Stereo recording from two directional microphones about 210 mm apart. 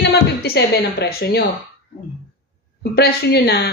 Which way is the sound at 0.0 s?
55° left (ahead or behind).